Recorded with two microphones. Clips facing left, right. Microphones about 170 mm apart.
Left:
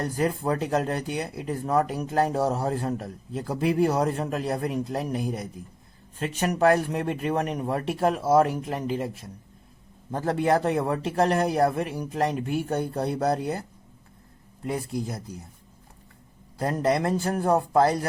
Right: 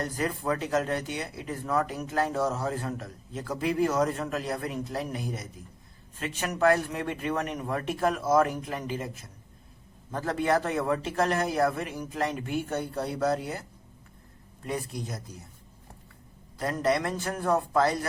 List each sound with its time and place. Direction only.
0.0 s a man's voice: 30° left (ahead or behind)
6.1 s a man's voice: 35° left (ahead or behind)
10.1 s a man's voice: 30° left (ahead or behind)
16.6 s a man's voice: 35° left (ahead or behind)